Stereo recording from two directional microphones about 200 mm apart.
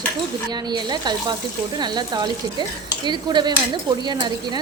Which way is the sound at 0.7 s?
20° right (ahead or behind).